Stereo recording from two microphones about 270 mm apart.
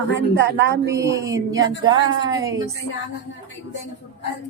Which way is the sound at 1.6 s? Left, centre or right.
Right.